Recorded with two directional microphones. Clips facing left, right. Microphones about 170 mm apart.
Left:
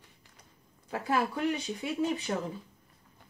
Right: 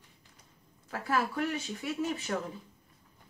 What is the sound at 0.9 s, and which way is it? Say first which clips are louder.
Speech: left 2 dB; 20° left (ahead or behind).